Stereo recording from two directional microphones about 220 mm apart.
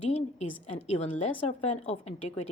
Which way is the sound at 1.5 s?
30° left (ahead or behind).